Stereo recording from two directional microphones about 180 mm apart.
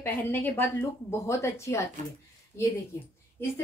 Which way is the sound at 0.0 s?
10° left (ahead or behind).